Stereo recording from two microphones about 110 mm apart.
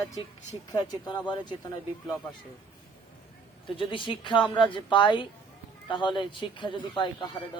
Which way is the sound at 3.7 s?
50° left (ahead or behind).